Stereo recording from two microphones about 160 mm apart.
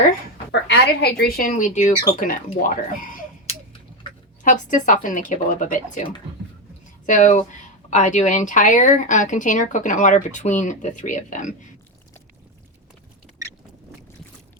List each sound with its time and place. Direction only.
0.7 s a woman's voice: 90° left; by 3.2 s 55° left (ahead or behind)
4.4 s speech: 55° left (ahead or behind)